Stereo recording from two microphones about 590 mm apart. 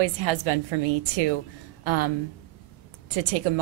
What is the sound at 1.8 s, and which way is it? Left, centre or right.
Speech, right.